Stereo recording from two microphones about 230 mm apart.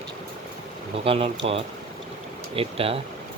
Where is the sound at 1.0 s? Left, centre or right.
Right.